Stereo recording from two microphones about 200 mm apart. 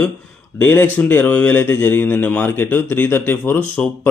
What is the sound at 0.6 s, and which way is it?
A man's voice, 10° left (ahead or behind).